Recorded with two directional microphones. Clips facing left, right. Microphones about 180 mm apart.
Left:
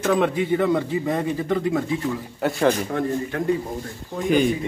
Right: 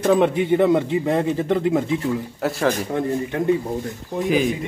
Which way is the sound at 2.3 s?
Centre (ahead or behind).